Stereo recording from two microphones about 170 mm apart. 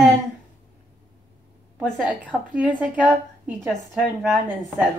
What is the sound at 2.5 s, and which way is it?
A woman's voice, 10° right (ahead or behind).